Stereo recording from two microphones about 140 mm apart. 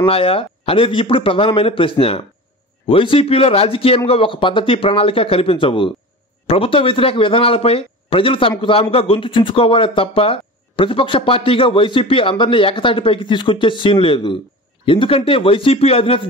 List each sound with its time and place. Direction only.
0.0 s speech: 40° left (ahead or behind)